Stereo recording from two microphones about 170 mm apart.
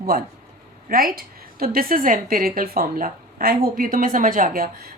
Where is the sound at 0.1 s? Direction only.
55° right (ahead or behind).